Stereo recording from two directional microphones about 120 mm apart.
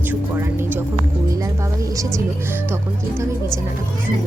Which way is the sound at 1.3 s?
25° right (ahead or behind).